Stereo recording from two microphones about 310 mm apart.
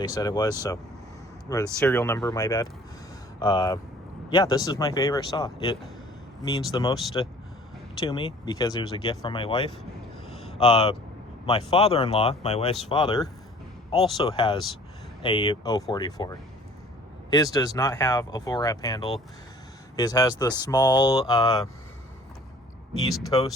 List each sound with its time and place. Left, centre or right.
0.0 s speech: centre
23.2 s speech: centre